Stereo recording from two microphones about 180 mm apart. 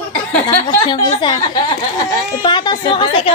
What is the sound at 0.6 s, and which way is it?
A woman's voice, 25° left (ahead or behind).